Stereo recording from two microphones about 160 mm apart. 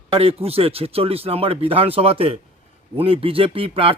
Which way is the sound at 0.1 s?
40° right (ahead or behind).